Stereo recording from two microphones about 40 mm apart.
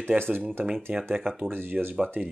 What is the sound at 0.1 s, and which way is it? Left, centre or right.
Speech, right.